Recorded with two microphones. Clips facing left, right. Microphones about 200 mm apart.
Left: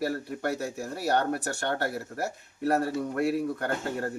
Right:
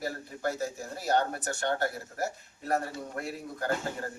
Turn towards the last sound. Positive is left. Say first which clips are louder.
# left 2 dB
turn(degrees=65)  # may be behind; listen again after turning